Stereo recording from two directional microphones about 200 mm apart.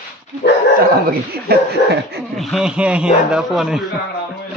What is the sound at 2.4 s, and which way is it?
A man's voice, centre (ahead or behind).